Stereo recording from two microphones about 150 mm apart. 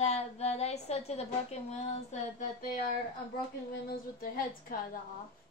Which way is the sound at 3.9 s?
75° left (ahead or behind).